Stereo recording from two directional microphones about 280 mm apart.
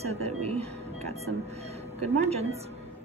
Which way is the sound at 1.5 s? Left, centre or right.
Right.